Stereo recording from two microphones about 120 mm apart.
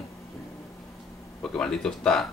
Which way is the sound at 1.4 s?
5° left (ahead or behind).